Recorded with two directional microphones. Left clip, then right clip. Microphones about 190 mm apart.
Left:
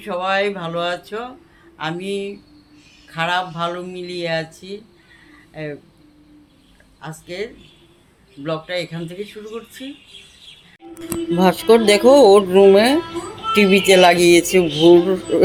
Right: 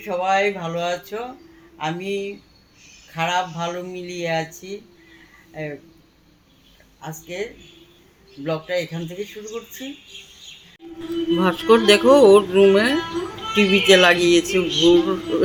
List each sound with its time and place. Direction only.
0.0 s speech: 10° left (ahead or behind)
5.6 s speech: 5° left (ahead or behind)
7.0 s speech: 5° left (ahead or behind)
8.4 s speech: centre (ahead or behind)
11.3 s speech: 15° left (ahead or behind)